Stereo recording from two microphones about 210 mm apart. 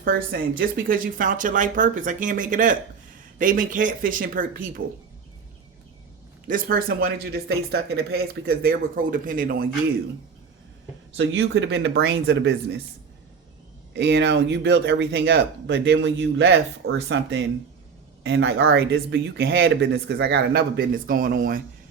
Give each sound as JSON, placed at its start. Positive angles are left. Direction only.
{"t": 0.0, "sound": "speech", "side_deg": -45}
{"t": 6.5, "sound": "speech", "side_deg": -45}
{"t": 11.2, "sound": "speech", "side_deg": -60}
{"t": 13.9, "sound": "speech", "side_deg": -55}